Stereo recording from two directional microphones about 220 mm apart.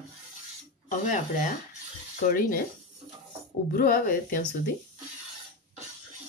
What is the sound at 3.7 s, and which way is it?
Speech, 40° left (ahead or behind).